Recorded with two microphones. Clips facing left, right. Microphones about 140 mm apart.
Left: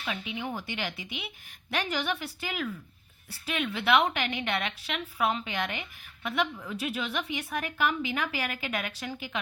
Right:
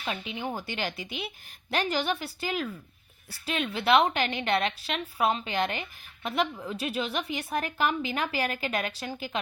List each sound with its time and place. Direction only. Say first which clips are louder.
0.0 s a woman's voice: right 1 dB; 35° right (ahead or behind)